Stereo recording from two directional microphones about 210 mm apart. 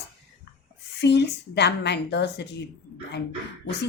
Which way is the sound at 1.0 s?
55° left (ahead or behind).